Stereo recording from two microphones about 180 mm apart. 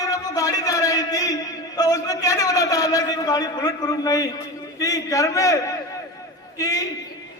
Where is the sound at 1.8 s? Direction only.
20° left (ahead or behind).